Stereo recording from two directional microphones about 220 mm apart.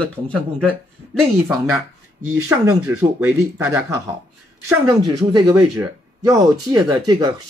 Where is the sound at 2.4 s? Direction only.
10° right (ahead or behind).